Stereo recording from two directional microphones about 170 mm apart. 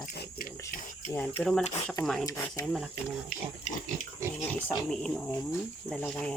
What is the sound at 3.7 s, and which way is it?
Pig, 40° left (ahead or behind).